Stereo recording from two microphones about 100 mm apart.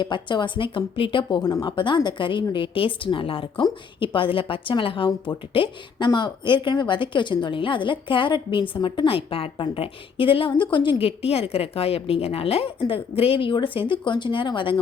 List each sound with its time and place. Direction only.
0.0 s a woman's voice: 50° left (ahead or behind)
6.1 s a woman's voice: 50° left (ahead or behind)